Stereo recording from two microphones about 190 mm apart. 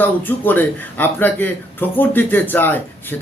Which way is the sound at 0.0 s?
10° left (ahead or behind).